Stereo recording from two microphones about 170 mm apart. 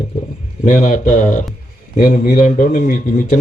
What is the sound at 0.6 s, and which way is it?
Speech, 50° left (ahead or behind).